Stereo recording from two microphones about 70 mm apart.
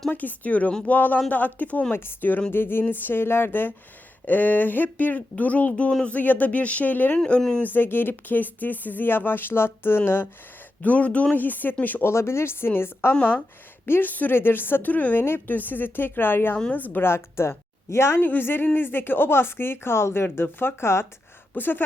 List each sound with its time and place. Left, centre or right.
0.1 s speech: left
0.9 s a woman's voice: left
7.2 s speech: centre
7.6 s speech: left
10.8 s speech: centre
12.1 s a woman's voice: left